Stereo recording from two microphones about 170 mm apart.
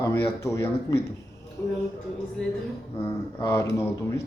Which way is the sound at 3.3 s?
15° left (ahead or behind).